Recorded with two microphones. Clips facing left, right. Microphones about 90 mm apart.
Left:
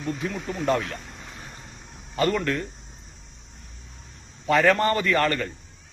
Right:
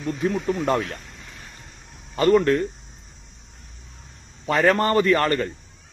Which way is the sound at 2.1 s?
35° right (ahead or behind).